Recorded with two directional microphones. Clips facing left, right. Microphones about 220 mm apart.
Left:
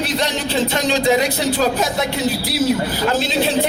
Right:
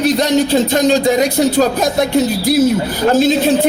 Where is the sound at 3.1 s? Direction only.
45° right (ahead or behind).